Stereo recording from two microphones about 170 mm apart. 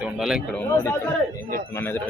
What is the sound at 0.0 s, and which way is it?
Speech, 5° right (ahead or behind).